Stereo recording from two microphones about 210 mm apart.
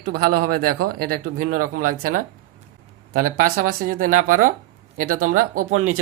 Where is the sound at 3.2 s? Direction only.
45° right (ahead or behind).